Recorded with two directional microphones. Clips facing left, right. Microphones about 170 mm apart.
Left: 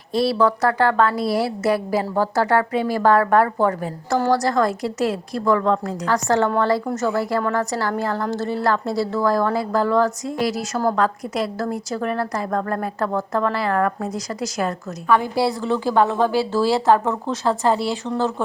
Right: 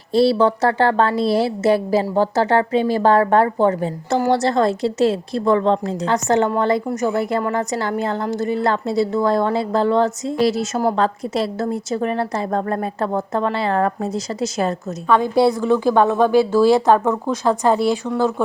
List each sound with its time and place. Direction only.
0.1 s a woman's voice: 30° right (ahead or behind)